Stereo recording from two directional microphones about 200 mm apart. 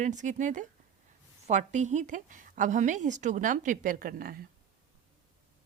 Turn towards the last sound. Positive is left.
turn(degrees=-45)  # may be behind; listen again after turning